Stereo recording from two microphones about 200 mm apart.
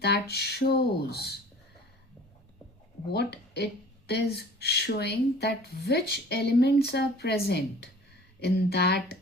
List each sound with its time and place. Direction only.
0.0 s speech: 55° left (ahead or behind)
3.1 s speech: 55° left (ahead or behind)